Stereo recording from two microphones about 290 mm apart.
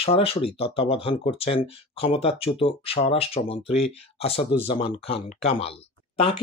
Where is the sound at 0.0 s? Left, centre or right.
Centre.